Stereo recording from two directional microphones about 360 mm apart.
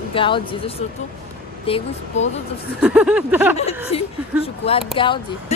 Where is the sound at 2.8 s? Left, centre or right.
Centre.